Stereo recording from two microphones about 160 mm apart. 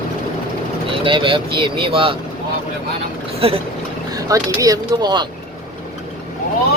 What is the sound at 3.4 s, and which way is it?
Speech, 35° right (ahead or behind).